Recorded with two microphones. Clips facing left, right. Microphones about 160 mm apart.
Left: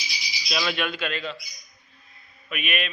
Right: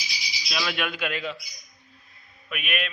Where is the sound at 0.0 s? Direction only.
Centre (ahead or behind).